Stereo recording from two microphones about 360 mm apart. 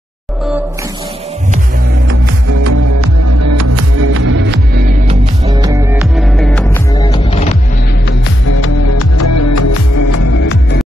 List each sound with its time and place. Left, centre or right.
2.6 s music: right
5.5 s music: centre
8.5 s music: left